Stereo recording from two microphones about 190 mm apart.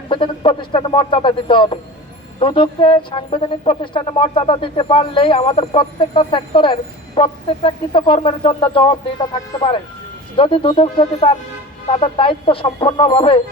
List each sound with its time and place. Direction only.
0.1 s speech: 25° left (ahead or behind)